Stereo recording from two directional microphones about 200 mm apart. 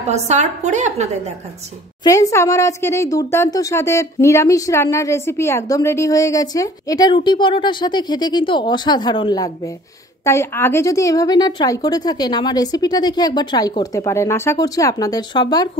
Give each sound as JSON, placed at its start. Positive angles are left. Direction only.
{"t": 0.0, "sound": "a woman's voice", "side_deg": -35}
{"t": 2.0, "sound": "a woman's voice", "side_deg": 15}